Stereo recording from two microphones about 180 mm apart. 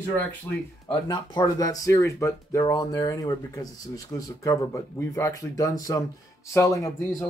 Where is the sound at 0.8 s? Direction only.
25° left (ahead or behind).